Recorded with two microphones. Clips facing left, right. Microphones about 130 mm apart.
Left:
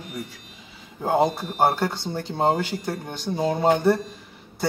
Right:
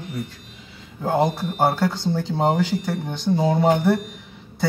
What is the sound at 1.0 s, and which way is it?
Speech, 15° left (ahead or behind).